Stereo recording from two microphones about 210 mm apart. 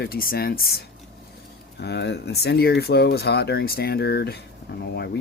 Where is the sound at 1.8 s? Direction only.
55° left (ahead or behind).